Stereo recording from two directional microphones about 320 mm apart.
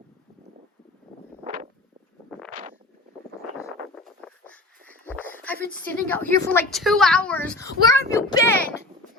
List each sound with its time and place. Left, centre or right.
2.5 s wind noise: right
3.8 s a sound: centre
5.7 s a woman's voice: centre